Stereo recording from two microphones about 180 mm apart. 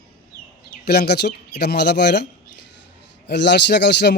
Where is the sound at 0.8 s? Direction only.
65° left (ahead or behind).